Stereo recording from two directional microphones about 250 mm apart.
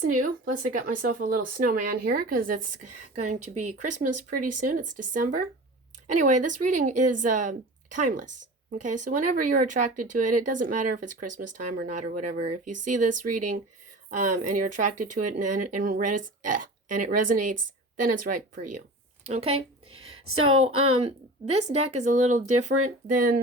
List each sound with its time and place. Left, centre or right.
0.0 s speech: right
11.3 s speech: right
11.5 s speech: right
19.9 s a woman's voice: right
20.7 s speech: right
20.9 s a woman's voice: right
22.0 s speech: right